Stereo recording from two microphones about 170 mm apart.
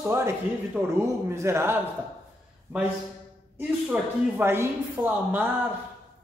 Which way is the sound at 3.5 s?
10° right (ahead or behind).